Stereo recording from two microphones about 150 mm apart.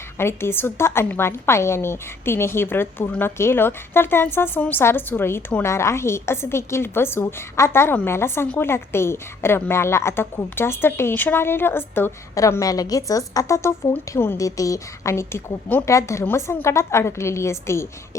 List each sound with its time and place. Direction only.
0.2 s a woman's voice: 15° left (ahead or behind)